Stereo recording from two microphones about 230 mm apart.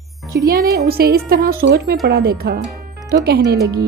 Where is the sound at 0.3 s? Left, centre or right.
Right.